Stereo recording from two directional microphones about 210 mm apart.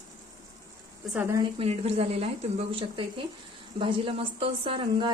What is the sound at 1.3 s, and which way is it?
A woman's voice, 30° right (ahead or behind).